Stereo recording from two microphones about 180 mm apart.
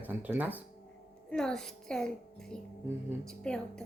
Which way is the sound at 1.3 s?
5° left (ahead or behind).